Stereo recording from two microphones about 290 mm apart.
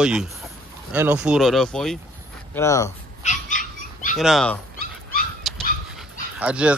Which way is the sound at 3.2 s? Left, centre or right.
Left.